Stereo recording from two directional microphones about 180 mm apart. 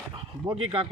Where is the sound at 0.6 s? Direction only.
30° right (ahead or behind).